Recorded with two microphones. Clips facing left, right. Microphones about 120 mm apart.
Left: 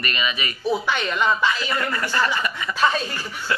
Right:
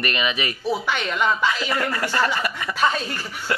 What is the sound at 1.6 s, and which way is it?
A man's voice, 45° right (ahead or behind).